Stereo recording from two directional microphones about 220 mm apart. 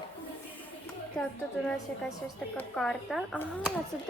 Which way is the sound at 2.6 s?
5° left (ahead or behind).